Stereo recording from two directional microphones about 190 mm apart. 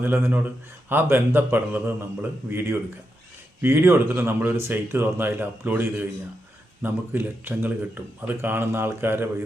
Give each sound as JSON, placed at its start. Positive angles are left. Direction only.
{"t": 0.0, "sound": "speech", "side_deg": -10}